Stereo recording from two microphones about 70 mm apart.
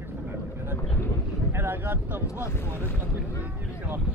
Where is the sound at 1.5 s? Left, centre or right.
Right.